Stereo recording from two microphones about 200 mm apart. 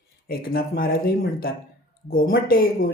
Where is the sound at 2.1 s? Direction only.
45° left (ahead or behind).